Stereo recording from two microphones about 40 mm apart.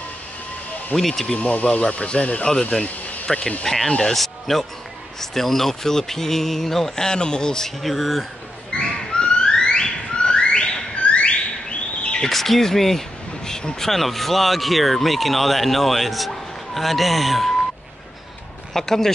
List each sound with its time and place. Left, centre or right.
0.9 s speech: centre
1.4 s speech: left
3.3 s speech: centre
7.8 s speech: centre
8.7 s a sound: left
12.2 s speech: centre
18.7 s speech: centre